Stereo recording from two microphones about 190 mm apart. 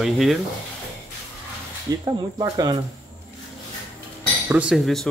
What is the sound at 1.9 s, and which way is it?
Speech, 20° right (ahead or behind).